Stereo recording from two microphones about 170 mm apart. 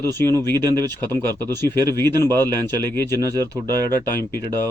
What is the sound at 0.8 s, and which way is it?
Speech, 25° right (ahead or behind).